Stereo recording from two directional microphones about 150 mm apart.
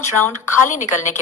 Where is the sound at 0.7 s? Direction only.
55° left (ahead or behind).